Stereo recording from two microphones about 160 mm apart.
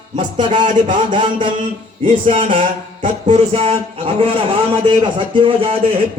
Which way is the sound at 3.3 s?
40° right (ahead or behind).